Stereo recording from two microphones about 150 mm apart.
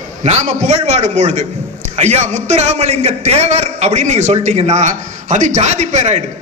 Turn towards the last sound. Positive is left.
turn(degrees=-50)  # may be behind; listen again after turning